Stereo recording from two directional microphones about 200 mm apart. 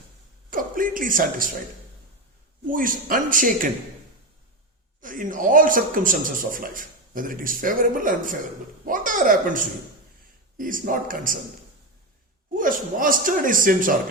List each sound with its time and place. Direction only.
0.5 s speech: 45° right (ahead or behind)
2.6 s a man's voice: 45° right (ahead or behind)
4.9 s a man's voice: 40° right (ahead or behind)
12.5 s a man's voice: 45° right (ahead or behind)